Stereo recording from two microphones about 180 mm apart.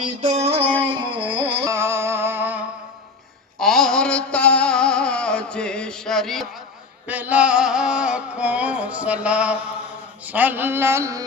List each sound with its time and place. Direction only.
0.0 s music: 40° right (ahead or behind)
1.7 s music: 15° right (ahead or behind)
3.6 s music: centre (ahead or behind)
7.1 s music: 10° right (ahead or behind)
10.2 s a man's voice: 10° right (ahead or behind)